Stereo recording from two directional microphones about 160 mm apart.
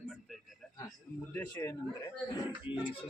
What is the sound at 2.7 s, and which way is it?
Speech, 35° left (ahead or behind).